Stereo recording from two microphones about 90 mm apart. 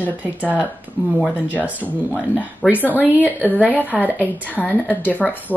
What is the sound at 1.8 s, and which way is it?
Speech, 15° right (ahead or behind).